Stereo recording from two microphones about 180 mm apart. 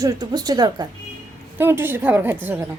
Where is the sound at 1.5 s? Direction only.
10° right (ahead or behind).